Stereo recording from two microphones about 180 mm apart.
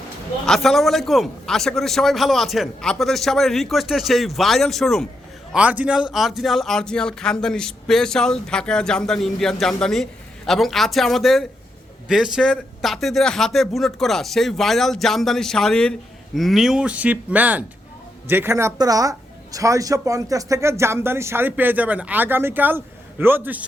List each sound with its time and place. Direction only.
0.4 s speech: centre (ahead or behind)